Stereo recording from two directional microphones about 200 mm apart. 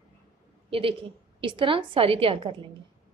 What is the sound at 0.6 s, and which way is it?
A woman's voice, 25° right (ahead or behind).